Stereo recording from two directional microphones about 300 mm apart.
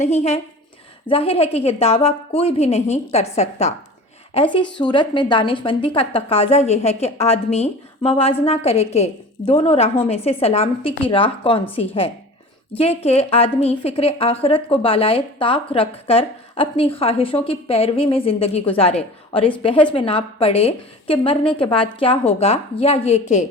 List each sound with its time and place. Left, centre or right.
0.0 s a woman's voice: left